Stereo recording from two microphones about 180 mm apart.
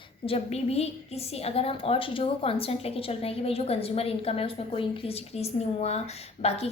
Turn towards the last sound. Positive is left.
turn(degrees=35)  # may be behind; listen again after turning